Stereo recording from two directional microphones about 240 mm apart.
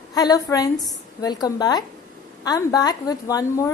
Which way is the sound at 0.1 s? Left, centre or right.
Centre.